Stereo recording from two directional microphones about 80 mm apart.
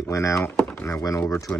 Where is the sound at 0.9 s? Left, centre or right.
Left.